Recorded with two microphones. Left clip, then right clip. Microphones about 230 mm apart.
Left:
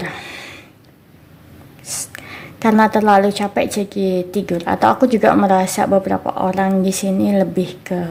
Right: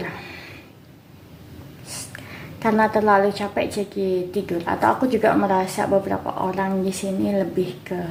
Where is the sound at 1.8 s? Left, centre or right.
Left.